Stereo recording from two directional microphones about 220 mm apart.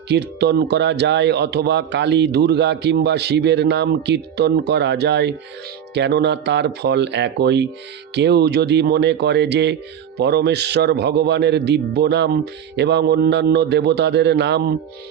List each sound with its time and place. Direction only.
0.1 s a man's voice: 50° right (ahead or behind)